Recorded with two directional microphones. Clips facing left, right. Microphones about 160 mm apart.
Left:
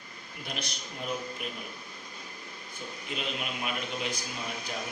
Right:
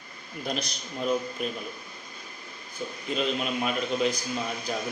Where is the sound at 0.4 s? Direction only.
35° right (ahead or behind).